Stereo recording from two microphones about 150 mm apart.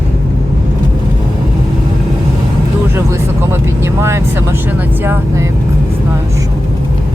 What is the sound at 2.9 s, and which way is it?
Vehicle, 15° right (ahead or behind).